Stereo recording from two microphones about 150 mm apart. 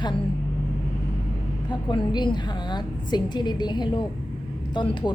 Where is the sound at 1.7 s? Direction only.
30° left (ahead or behind).